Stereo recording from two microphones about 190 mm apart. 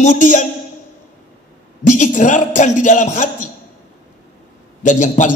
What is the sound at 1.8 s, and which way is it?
Speech, 40° left (ahead or behind).